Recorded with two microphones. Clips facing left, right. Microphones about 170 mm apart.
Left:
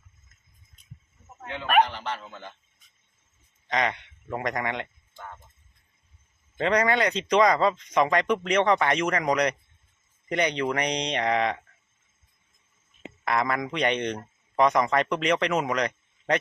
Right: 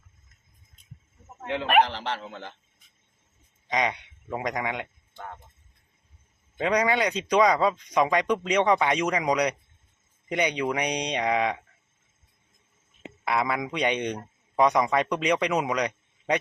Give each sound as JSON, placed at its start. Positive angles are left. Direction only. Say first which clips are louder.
{"t": 1.8, "sound": "a man's voice", "louder": "even", "side_deg": -90}
{"t": 3.7, "sound": "speech", "louder": "even", "side_deg": -15}
{"t": 6.6, "sound": "speech", "louder": "left 1 dB", "side_deg": -10}
{"t": 13.2, "sound": "speech", "louder": "even", "side_deg": -10}